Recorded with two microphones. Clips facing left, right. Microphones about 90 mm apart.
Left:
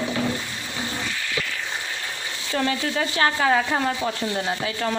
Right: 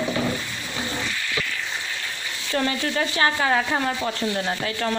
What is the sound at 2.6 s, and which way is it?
Speech, centre (ahead or behind).